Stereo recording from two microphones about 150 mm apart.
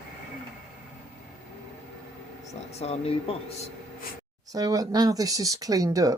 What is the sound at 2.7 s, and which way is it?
Speech, 45° left (ahead or behind).